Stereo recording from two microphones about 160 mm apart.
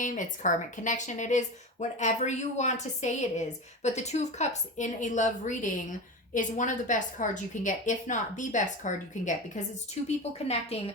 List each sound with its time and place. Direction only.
0.0 s a woman's voice: 55° left (ahead or behind)